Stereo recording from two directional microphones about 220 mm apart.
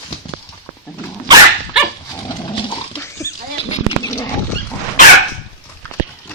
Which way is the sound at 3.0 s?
15° left (ahead or behind).